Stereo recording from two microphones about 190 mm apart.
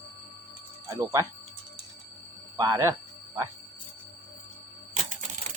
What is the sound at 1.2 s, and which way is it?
Speech, 20° right (ahead or behind).